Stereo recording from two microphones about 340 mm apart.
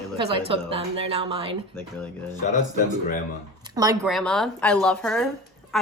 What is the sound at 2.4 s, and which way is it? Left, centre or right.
Speech, left.